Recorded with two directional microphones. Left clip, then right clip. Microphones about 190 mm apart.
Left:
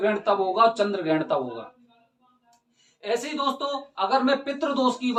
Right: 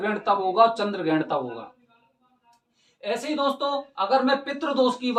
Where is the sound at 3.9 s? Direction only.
15° left (ahead or behind).